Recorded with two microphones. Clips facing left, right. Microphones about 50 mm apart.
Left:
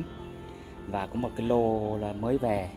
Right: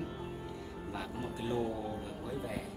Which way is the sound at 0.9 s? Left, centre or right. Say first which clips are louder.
Left 10 dB; left.